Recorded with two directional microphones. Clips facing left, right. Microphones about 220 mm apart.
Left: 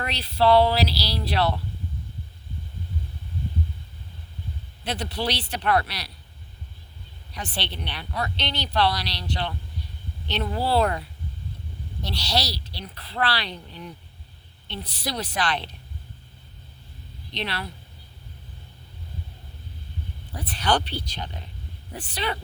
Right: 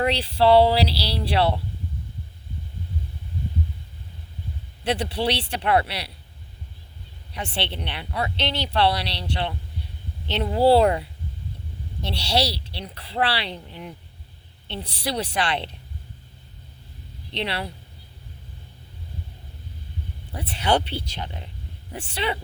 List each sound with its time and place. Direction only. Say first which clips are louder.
0.0 s speech: right 3 dB; 30° right (ahead or behind)
4.9 s speech: right 4 dB; 30° right (ahead or behind)
7.3 s speech: right 3 dB; 25° right (ahead or behind)
12.0 s speech: right 4 dB; 25° right (ahead or behind)
17.3 s speech: right 3 dB; 25° right (ahead or behind)
20.4 s speech: right 2 dB; 25° right (ahead or behind)